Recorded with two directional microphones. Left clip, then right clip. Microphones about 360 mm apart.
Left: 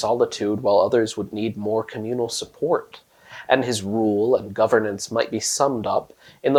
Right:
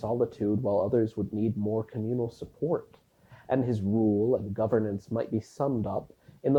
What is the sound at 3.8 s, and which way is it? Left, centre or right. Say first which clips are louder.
Speech: left 4 dB; centre.